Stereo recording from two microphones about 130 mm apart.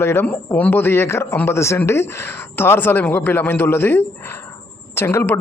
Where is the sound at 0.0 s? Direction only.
20° left (ahead or behind).